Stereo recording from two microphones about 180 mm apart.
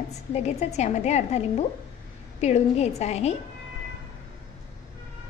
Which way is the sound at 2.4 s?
40° left (ahead or behind).